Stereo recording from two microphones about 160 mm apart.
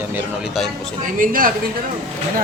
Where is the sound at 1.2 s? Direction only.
60° right (ahead or behind).